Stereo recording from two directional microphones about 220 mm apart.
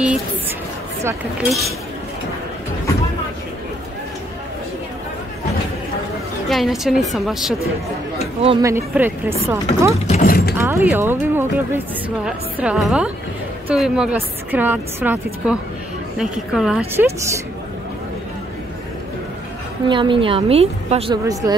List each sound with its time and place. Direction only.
6.5 s a woman's voice: centre (ahead or behind)
8.4 s a woman's voice: 25° right (ahead or behind)
8.6 s a woman's voice: 10° right (ahead or behind)
10.0 s speech: 35° left (ahead or behind)
10.6 s a woman's voice: 10° right (ahead or behind)
19.9 s a woman's voice: 20° right (ahead or behind)
21.2 s a woman's voice: 15° right (ahead or behind)